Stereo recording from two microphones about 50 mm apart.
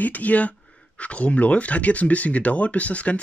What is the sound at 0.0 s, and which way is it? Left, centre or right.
Speech, left.